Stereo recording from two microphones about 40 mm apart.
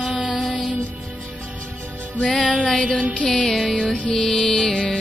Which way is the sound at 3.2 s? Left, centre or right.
Left.